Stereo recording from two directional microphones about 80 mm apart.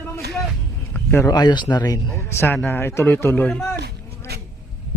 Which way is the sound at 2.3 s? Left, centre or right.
Left.